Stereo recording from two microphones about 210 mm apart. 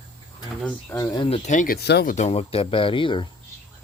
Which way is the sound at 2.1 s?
30° left (ahead or behind).